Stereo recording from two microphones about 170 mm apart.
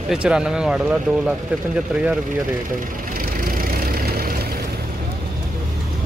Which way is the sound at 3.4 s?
55° right (ahead or behind).